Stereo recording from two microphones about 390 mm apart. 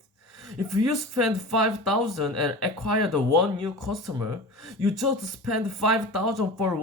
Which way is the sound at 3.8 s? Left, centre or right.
Centre.